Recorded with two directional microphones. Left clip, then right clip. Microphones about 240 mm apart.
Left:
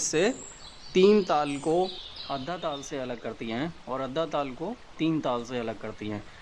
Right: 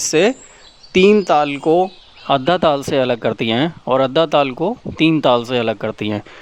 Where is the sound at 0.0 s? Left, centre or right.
Right.